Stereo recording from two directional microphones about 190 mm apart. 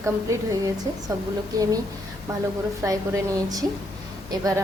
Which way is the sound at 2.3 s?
20° right (ahead or behind).